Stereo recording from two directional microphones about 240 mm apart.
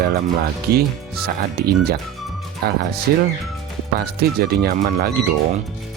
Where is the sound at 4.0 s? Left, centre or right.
Right.